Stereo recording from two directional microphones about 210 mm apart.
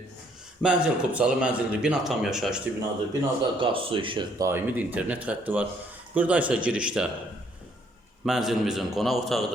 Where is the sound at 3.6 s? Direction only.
25° right (ahead or behind); by 7.1 s 5° right (ahead or behind).